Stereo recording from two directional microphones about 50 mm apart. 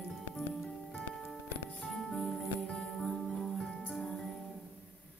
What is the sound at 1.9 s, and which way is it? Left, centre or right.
Music, centre.